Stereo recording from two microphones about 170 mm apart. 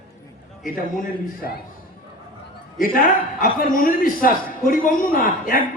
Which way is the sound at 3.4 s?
55° left (ahead or behind).